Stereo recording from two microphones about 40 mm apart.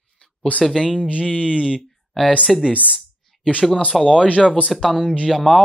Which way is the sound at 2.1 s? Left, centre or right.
Centre.